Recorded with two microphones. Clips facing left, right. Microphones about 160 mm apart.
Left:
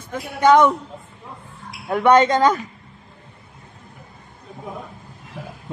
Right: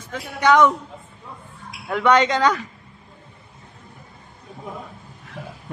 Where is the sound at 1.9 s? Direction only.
45° left (ahead or behind).